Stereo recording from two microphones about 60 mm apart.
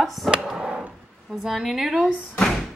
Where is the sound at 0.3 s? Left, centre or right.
Centre.